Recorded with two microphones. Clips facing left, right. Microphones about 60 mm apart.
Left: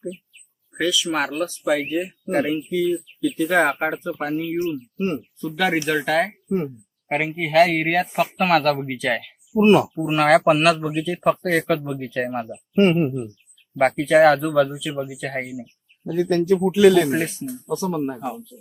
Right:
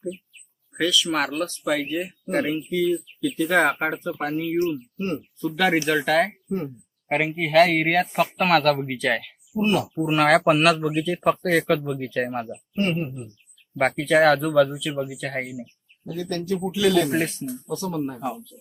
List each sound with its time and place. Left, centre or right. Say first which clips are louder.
0.7 s speech: left 1 dB; centre
4.9 s speech: left 3 dB; left
5.4 s speech: right 1 dB; centre
9.6 s speech: left 7 dB; left
9.9 s speech: left 2 dB; centre
12.7 s speech: left 8 dB; left
13.8 s speech: left 3 dB; centre
16.1 s speech: left 8 dB; left
17.1 s speech: left 1 dB; centre
17.7 s speech: left 4 dB; left